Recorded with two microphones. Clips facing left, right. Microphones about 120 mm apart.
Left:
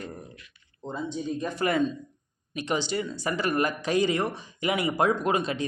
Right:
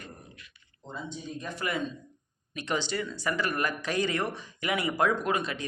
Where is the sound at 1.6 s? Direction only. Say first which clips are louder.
Left 7 dB; 40° left (ahead or behind).